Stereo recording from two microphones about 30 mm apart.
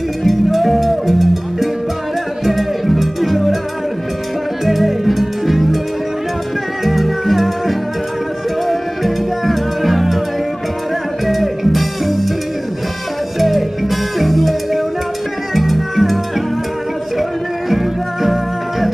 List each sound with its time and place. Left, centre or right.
0.2 s music: centre
4.6 s music: centre
6.8 s music: centre
11.2 s music: centre
13.4 s music: centre
18.2 s music: centre